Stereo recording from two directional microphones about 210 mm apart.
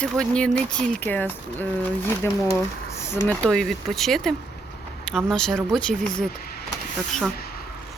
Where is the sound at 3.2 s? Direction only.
5° left (ahead or behind).